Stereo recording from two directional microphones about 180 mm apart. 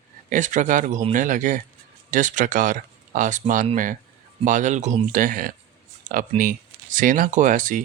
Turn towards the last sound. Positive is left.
turn(degrees=-45)  # may be behind; listen again after turning